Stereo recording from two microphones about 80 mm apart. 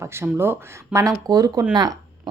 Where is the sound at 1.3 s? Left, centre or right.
Right.